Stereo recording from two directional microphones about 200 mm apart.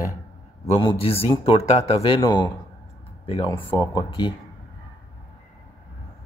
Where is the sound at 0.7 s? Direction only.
25° left (ahead or behind).